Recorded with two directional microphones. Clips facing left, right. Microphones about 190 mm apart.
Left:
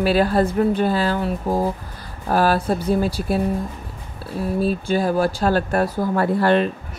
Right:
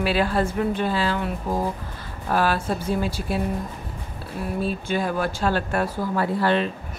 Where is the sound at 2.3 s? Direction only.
40° left (ahead or behind).